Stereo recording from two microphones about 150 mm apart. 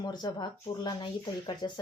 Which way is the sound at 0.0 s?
30° left (ahead or behind).